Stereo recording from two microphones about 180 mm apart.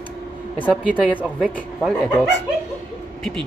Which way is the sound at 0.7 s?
5° right (ahead or behind).